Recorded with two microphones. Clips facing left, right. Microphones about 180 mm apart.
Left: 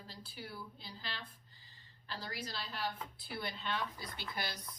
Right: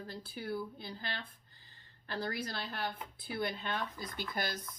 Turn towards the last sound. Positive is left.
turn(degrees=-50)  # may be behind; listen again after turning